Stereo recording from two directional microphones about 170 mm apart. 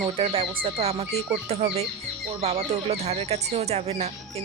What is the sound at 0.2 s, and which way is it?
Speech, 35° right (ahead or behind).